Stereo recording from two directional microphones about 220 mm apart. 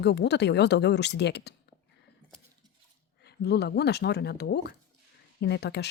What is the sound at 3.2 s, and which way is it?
Speech, 50° left (ahead or behind).